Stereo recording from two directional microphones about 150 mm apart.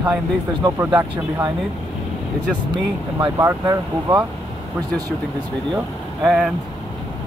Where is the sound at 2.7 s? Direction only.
30° right (ahead or behind).